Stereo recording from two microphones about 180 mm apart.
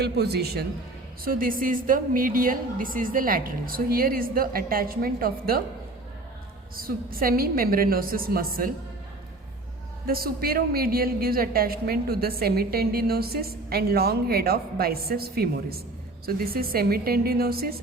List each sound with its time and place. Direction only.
0.0 s a woman's voice: 65° right (ahead or behind)
1.2 s a woman's voice: 50° right (ahead or behind)
6.7 s a woman's voice: 55° right (ahead or behind)
10.1 s a woman's voice: 55° right (ahead or behind)